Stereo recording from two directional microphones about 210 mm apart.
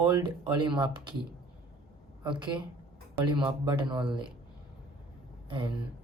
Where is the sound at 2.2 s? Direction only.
20° right (ahead or behind).